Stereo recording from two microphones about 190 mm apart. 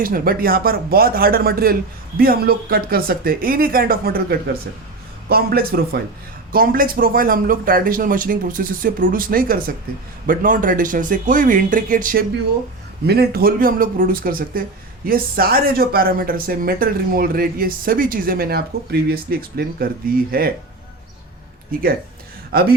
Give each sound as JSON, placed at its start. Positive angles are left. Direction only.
{"t": 0.0, "sound": "speech", "side_deg": -50}
{"t": 21.7, "sound": "speech", "side_deg": -50}